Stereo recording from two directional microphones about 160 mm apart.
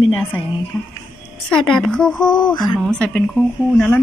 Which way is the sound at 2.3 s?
25° left (ahead or behind).